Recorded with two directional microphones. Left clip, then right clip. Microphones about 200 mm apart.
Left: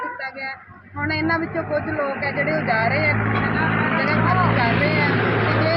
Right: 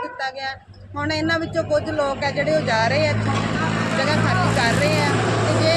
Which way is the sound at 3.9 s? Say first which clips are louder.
Right 1 dB; 30° right (ahead or behind).